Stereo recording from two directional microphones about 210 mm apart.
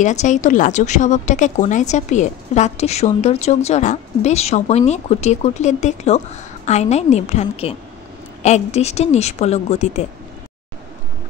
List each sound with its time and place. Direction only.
0.0 s a woman's voice: 35° left (ahead or behind)